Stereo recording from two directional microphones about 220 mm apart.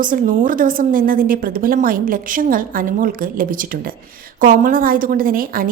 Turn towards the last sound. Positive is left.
turn(degrees=-40)  # may be behind; listen again after turning